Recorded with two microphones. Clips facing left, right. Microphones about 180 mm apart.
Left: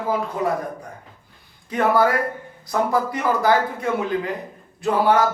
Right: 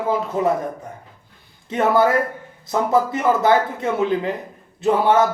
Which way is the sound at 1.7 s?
25° right (ahead or behind).